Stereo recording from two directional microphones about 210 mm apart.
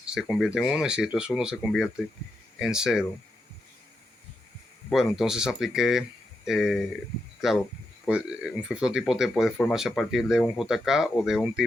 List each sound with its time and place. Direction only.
0.0 s speech: 5° right (ahead or behind)
4.9 s speech: centre (ahead or behind)